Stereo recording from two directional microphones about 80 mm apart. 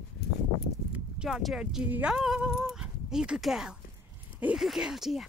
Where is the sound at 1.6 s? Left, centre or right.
Centre.